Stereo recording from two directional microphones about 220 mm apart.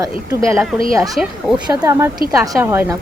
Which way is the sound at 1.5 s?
15° right (ahead or behind).